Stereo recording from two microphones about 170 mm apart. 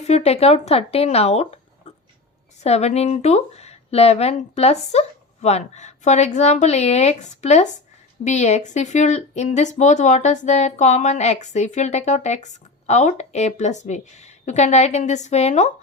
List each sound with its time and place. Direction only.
0.0 s speech: 40° left (ahead or behind)
2.6 s speech: 40° left (ahead or behind)